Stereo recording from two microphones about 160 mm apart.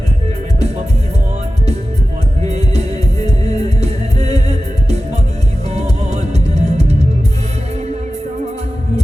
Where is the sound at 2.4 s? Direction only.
40° right (ahead or behind).